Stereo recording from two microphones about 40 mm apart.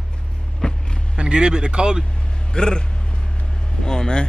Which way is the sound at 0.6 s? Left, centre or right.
Left.